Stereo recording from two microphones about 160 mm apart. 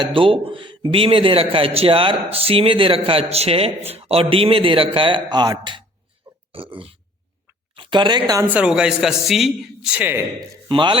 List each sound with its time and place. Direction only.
0.0 s a man's voice: 35° right (ahead or behind)
8.4 s a man's voice: 5° right (ahead or behind)
10.7 s a man's voice: 30° right (ahead or behind)